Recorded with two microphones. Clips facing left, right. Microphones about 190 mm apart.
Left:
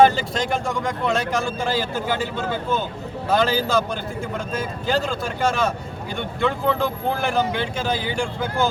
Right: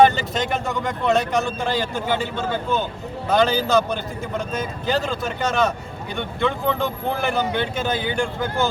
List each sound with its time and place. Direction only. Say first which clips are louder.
0.0 s speech: even; centre (ahead or behind)